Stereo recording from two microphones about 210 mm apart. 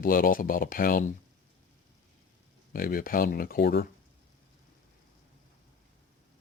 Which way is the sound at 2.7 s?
45° left (ahead or behind).